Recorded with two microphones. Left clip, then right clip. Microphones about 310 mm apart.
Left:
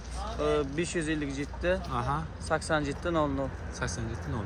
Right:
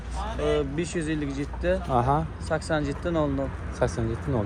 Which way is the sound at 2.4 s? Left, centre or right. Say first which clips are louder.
Left 2 dB; left.